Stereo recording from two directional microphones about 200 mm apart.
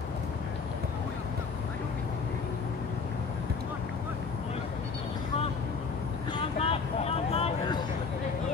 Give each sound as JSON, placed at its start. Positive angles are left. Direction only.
{"t": 6.3, "sound": "vehicle", "side_deg": 30}